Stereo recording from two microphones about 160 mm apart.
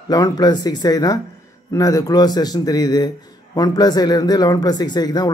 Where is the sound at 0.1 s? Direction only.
25° left (ahead or behind).